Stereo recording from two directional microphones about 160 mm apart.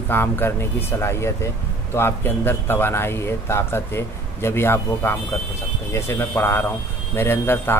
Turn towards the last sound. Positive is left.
turn(degrees=15)  # may be behind; listen again after turning